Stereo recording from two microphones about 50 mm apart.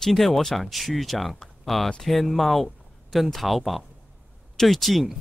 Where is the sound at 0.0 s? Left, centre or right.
Centre.